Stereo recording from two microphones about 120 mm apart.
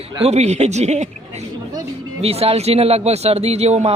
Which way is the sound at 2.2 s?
55° right (ahead or behind).